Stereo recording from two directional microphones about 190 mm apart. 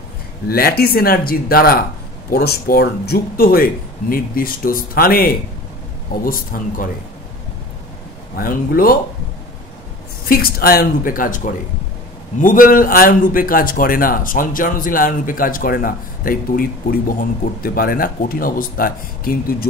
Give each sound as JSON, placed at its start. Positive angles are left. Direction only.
{"t": 0.5, "sound": "a man's voice", "side_deg": 55}
{"t": 8.4, "sound": "a man's voice", "side_deg": 50}
{"t": 10.2, "sound": "a man's voice", "side_deg": 50}